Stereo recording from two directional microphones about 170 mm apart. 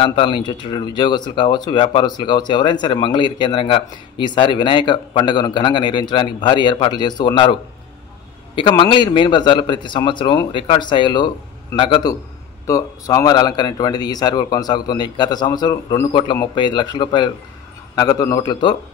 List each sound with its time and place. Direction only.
0.0 s a man's voice: 30° left (ahead or behind)
8.5 s a man's voice: 30° left (ahead or behind)